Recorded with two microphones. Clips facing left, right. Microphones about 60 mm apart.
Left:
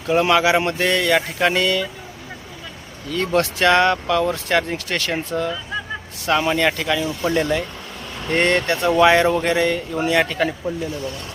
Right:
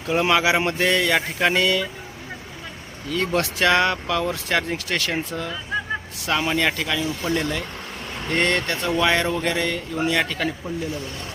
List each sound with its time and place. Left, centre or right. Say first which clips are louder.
0.1 s speech: left 3 dB; centre
3.1 s a man's voice: left 3 dB; centre